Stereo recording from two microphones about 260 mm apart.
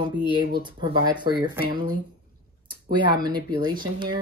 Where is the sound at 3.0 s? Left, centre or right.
Centre.